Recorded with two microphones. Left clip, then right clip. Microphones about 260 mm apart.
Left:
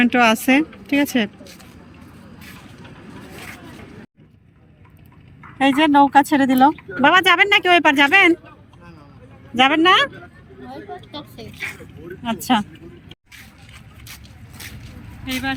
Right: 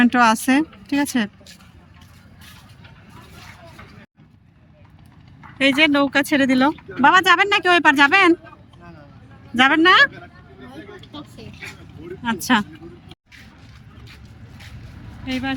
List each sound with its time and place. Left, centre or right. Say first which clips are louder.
0.0 s speech: even; centre
5.5 s speech: left 2 dB; centre
9.6 s speech: right 1 dB; centre
10.7 s vehicle: left 6 dB; centre
12.5 s speech: even; centre
15.3 s speech: left 1 dB; centre